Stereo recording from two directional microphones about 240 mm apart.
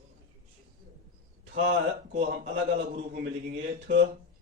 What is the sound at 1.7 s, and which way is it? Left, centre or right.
A man's voice, right.